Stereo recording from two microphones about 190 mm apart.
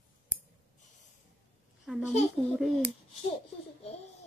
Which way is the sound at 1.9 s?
5° right (ahead or behind).